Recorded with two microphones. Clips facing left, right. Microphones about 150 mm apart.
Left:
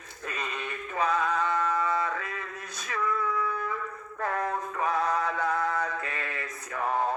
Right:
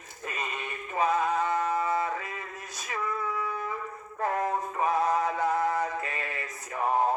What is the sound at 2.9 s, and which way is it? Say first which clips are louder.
Music: left 2 dB; 20° right (ahead or behind).